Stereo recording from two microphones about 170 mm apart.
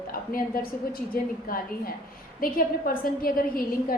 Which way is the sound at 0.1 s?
60° left (ahead or behind).